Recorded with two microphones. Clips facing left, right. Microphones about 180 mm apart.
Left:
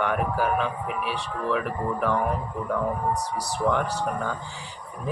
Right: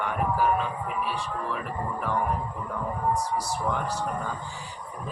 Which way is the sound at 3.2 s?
70° left (ahead or behind).